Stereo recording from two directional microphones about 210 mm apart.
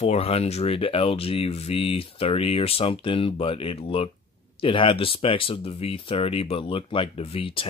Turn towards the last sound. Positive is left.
turn(degrees=25)  # may be behind; listen again after turning